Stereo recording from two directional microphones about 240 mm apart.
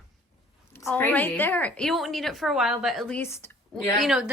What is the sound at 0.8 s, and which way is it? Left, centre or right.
A woman's voice, centre.